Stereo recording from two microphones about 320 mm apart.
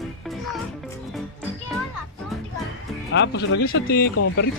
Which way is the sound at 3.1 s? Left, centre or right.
Left.